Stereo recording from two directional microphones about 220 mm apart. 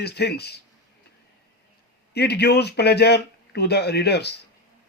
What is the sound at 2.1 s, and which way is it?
Speech, 50° left (ahead or behind).